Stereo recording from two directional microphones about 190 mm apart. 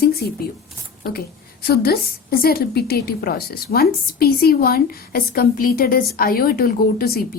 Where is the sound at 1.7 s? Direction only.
50° left (ahead or behind).